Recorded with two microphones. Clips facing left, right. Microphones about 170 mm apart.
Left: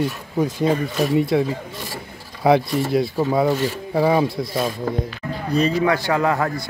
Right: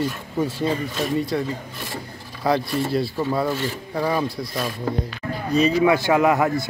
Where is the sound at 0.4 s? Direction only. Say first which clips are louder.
Left 4 dB; 15° left (ahead or behind).